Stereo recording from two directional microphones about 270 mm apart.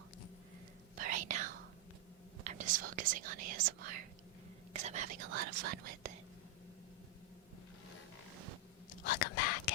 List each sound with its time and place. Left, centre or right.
0.9 s whispering: right
4.7 s speech: right
9.0 s whispering: left